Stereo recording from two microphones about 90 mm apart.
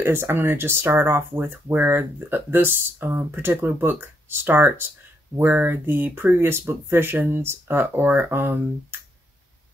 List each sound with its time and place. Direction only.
0.0 s speech: 25° right (ahead or behind)